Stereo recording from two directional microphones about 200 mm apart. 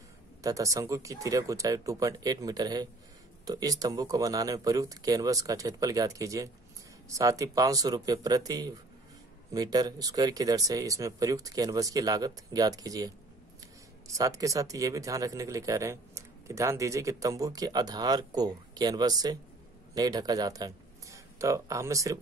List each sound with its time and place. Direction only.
0.4 s speech: 15° right (ahead or behind)